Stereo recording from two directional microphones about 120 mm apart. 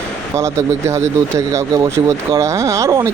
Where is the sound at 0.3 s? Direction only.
25° right (ahead or behind).